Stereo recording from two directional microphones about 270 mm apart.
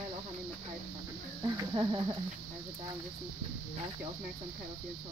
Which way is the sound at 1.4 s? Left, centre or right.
Centre.